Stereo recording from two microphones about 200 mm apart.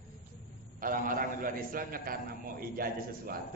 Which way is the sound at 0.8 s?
45° right (ahead or behind).